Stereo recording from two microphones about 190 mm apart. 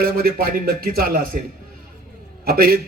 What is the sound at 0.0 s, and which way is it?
A man's voice, 50° right (ahead or behind).